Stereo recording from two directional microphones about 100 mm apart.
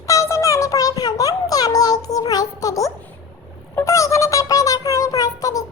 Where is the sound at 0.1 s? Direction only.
30° left (ahead or behind).